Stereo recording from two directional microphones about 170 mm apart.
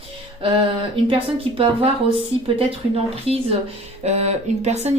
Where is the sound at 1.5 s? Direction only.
30° right (ahead or behind).